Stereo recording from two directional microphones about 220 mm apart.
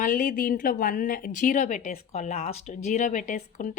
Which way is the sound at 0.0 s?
40° left (ahead or behind).